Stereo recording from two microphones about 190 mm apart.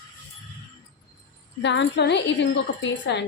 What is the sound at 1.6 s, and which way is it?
Speech, 65° left (ahead or behind).